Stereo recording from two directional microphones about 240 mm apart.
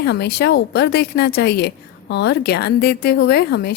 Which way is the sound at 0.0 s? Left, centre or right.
Left.